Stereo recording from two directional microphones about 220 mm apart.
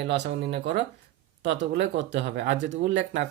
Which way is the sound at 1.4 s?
55° right (ahead or behind).